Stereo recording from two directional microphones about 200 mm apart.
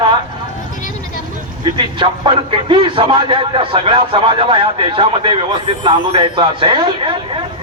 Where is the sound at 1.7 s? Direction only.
25° right (ahead or behind).